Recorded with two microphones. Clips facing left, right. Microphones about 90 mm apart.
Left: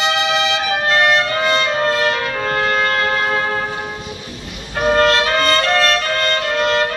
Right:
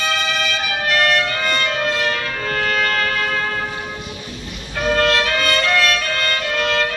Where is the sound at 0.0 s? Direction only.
25° left (ahead or behind).